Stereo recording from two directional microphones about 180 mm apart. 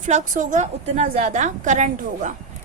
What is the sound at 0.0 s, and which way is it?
A woman's voice, 40° right (ahead or behind).